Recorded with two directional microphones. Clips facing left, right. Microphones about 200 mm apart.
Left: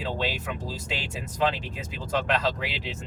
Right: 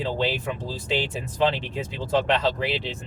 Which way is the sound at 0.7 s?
30° right (ahead or behind).